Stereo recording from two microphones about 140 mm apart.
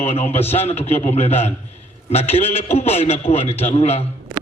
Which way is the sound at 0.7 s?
50° left (ahead or behind).